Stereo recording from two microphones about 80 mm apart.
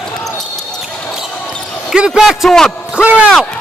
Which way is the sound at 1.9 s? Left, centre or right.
Centre.